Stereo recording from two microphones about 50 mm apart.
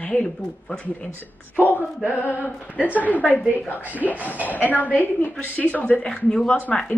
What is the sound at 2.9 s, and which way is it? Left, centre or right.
Speech, right.